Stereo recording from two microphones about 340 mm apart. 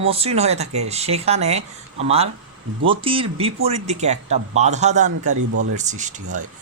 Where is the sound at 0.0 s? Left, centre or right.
Centre.